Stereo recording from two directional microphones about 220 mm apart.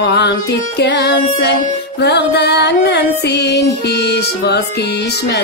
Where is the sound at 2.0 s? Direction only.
50° left (ahead or behind).